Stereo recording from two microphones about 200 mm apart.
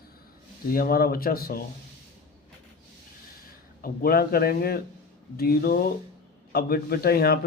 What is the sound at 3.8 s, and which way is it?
A man's voice, 50° left (ahead or behind).